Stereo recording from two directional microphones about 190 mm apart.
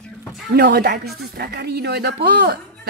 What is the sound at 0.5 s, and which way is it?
A woman's voice, 55° right (ahead or behind).